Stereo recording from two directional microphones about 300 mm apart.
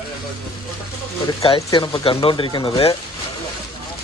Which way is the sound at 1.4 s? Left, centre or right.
Centre.